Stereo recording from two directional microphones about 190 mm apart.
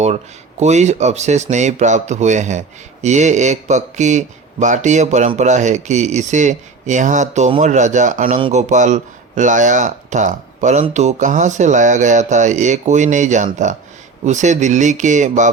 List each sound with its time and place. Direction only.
0.6 s speech: 35° right (ahead or behind)
8.4 s speech: 30° right (ahead or behind)